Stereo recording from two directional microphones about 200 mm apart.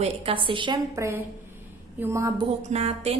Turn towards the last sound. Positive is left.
turn(degrees=-30)  # may be behind; listen again after turning